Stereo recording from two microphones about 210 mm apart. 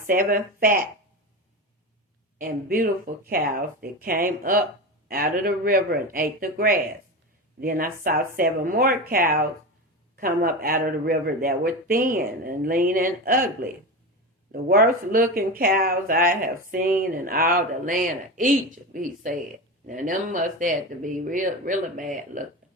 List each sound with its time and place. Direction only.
0.1 s speech: 40° right (ahead or behind)
2.4 s speech: 45° right (ahead or behind)